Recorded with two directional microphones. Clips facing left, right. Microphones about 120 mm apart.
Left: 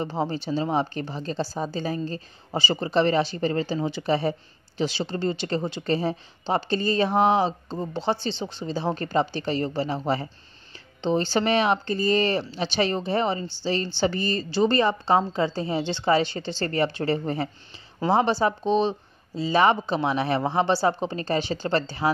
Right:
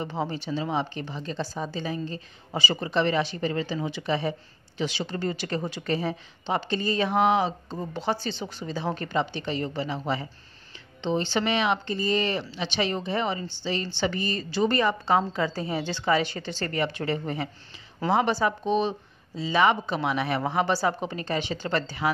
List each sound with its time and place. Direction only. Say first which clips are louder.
0.0 s speech: left 3 dB; 35° left (ahead or behind)